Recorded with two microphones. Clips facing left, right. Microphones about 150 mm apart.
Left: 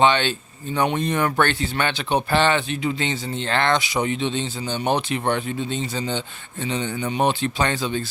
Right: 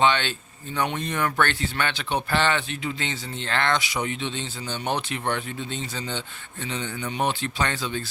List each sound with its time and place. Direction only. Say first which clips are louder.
0.0 s speech: left 4 dB; 25° left (ahead or behind)